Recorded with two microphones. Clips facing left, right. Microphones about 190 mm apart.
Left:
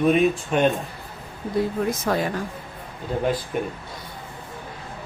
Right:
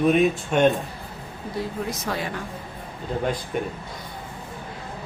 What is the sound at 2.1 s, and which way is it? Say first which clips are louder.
Speech: left 6 dB; 50° left (ahead or behind).